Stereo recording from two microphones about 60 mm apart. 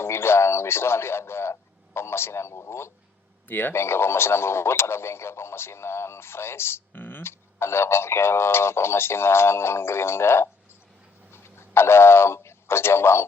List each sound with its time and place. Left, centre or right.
0.0 s speech: left
3.5 s speech: left